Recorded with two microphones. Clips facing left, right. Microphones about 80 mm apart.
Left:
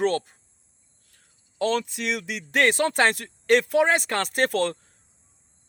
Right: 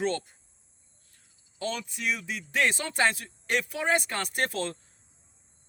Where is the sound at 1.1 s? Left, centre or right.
Left.